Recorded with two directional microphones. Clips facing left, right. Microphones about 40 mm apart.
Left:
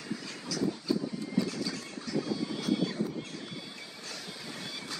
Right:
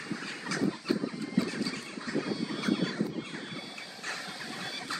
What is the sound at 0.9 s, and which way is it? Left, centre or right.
Vehicle, right.